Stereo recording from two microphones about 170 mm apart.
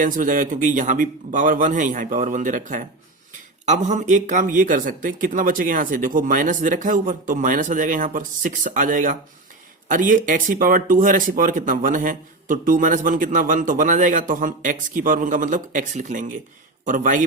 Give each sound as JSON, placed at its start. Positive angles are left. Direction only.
{"t": 0.0, "sound": "speech", "side_deg": -50}